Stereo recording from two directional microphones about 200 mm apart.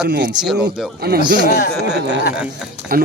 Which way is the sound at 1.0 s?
50° right (ahead or behind).